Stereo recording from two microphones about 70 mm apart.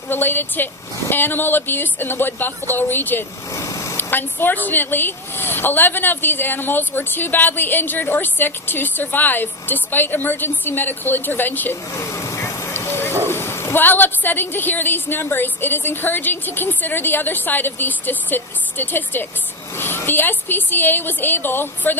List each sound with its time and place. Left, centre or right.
0.1 s a woman's voice: left
3.5 s vehicle: left
3.9 s a woman's voice: left
11.9 s vehicle: left
13.2 s a woman's voice: left